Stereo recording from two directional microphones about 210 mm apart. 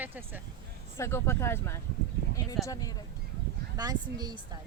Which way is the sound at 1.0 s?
15° left (ahead or behind).